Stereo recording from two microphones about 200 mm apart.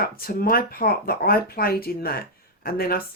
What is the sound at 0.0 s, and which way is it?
A woman's voice, 50° left (ahead or behind).